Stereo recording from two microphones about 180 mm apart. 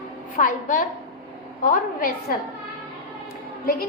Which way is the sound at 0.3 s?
50° left (ahead or behind).